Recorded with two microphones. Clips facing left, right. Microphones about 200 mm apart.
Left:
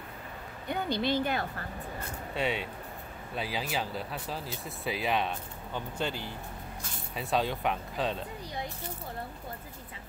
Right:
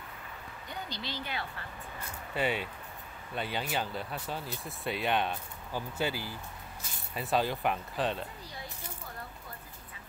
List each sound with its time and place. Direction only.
0.7 s speech: 55° left (ahead or behind)
2.3 s speech: centre (ahead or behind)